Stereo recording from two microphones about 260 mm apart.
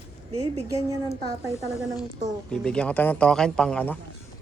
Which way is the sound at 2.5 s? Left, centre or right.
Centre.